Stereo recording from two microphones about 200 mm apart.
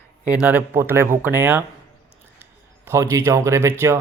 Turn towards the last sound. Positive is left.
turn(degrees=-15)  # may be behind; listen again after turning